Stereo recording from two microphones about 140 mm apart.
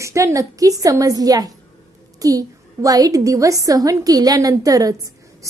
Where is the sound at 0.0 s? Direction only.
20° right (ahead or behind).